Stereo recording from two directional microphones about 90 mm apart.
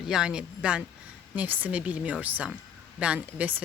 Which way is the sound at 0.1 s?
10° right (ahead or behind).